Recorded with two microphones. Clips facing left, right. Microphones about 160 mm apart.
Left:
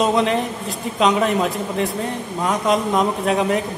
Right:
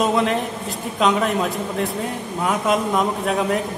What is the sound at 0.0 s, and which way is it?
A man's voice, centre (ahead or behind).